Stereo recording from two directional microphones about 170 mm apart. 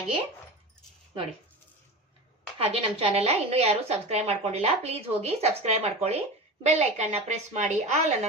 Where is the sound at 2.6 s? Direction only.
35° right (ahead or behind).